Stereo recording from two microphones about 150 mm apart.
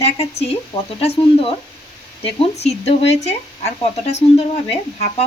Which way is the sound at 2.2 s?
40° left (ahead or behind).